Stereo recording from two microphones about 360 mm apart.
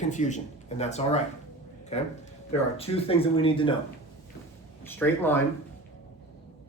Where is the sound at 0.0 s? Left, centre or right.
Centre.